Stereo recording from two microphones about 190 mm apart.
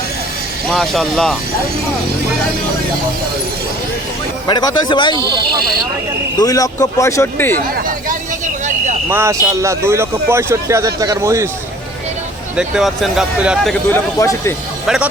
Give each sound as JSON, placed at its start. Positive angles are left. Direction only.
{"t": 0.7, "sound": "speech", "side_deg": 0}
{"t": 4.4, "sound": "speech", "side_deg": 25}
{"t": 6.3, "sound": "a man's voice", "side_deg": 20}
{"t": 9.0, "sound": "a man's voice", "side_deg": -15}
{"t": 12.5, "sound": "speech", "side_deg": 0}
{"t": 13.9, "sound": "a man's voice", "side_deg": 15}
{"t": 14.8, "sound": "speech", "side_deg": -5}